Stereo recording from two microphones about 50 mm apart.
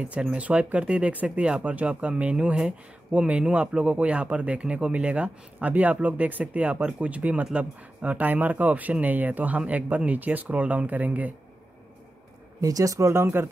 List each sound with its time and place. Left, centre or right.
0.0 s speech: right
12.8 s speech: right